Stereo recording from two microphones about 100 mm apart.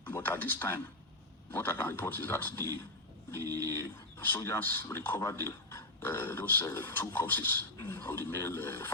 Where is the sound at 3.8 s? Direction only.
20° left (ahead or behind).